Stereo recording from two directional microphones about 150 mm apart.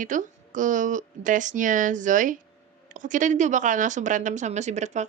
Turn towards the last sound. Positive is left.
turn(degrees=-50)  # may be behind; listen again after turning